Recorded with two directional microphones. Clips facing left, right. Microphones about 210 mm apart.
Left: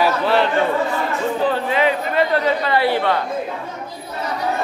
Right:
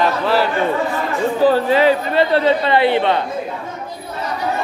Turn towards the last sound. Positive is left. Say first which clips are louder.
# right 3 dB
turn(degrees=-20)  # may be behind; listen again after turning